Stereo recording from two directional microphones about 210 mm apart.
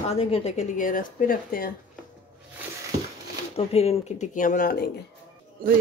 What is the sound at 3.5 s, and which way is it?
Speech, 30° left (ahead or behind).